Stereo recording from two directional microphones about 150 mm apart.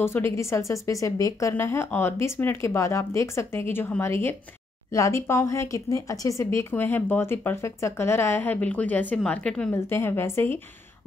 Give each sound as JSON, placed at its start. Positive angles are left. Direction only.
{"t": 0.0, "sound": "a woman's voice", "side_deg": 15}